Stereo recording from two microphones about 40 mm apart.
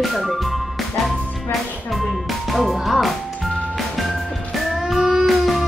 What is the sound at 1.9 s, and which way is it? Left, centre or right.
Music, centre.